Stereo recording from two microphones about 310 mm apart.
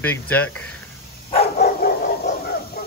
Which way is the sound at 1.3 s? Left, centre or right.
Left.